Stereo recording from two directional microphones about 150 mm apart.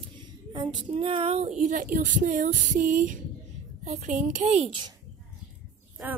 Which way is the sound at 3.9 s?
50° right (ahead or behind).